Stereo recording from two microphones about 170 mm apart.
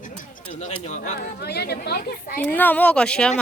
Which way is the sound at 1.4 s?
70° left (ahead or behind).